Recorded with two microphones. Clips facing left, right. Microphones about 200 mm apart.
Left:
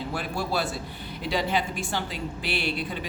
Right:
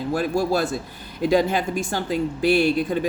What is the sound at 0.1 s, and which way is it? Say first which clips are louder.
Speech: right 10 dB; 45° right (ahead or behind).